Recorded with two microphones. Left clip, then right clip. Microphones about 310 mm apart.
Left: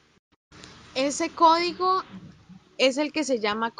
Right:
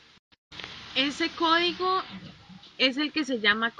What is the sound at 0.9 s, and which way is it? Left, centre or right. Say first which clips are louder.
A woman's voice: left 1 dB; centre.